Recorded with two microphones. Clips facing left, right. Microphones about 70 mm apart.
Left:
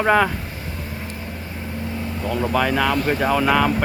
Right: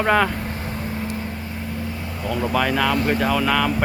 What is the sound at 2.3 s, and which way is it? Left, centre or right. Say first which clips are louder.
Speech: left 1 dB; centre.